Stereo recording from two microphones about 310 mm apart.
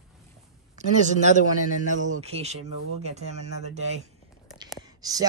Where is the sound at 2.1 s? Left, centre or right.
Centre.